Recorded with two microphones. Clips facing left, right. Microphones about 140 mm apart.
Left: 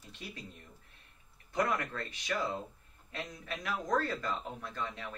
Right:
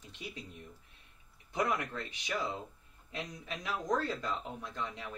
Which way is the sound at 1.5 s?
15° right (ahead or behind).